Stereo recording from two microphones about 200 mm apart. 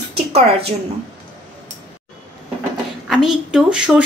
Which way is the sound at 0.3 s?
30° right (ahead or behind).